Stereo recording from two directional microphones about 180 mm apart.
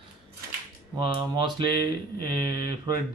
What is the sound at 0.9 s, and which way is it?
Speech, 25° right (ahead or behind).